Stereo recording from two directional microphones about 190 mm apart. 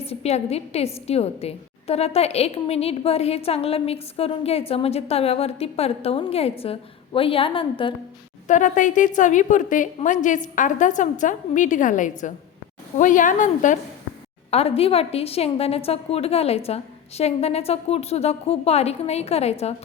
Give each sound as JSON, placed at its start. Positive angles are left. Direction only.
{"t": 0.0, "sound": "a woman's voice", "side_deg": 30}
{"t": 8.4, "sound": "a woman's voice", "side_deg": 40}
{"t": 14.5, "sound": "a woman's voice", "side_deg": 30}